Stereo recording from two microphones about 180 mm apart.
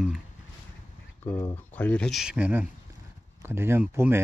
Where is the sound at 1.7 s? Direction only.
10° left (ahead or behind).